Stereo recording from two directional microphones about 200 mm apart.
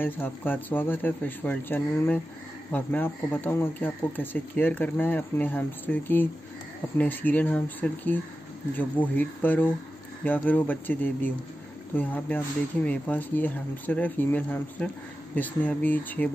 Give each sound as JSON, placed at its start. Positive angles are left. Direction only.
{"t": 0.0, "sound": "speech", "side_deg": 10}